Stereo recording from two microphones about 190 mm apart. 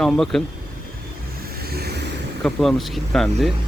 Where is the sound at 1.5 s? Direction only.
55° right (ahead or behind).